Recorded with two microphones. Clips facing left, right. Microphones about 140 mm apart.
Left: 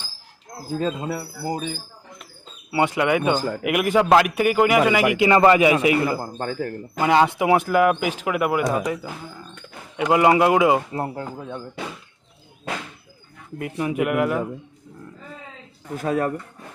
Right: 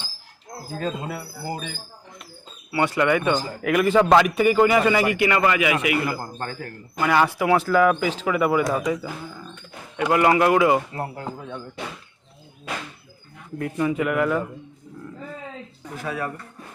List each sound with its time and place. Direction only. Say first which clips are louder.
0.8 s speech: left 3 dB; 15° left (ahead or behind)
2.7 s speech: left 1 dB; 15° left (ahead or behind)
5.1 s speech: left 5 dB; 25° left (ahead or behind)
6.2 s speech: left 5 dB; 15° left (ahead or behind)
10.0 s a man's voice: left 2 dB; 20° left (ahead or behind)
10.9 s speech: left 3 dB; 30° left (ahead or behind)
13.6 s speech: even; 10° left (ahead or behind)
16.0 s speech: left 7 dB; 45° left (ahead or behind)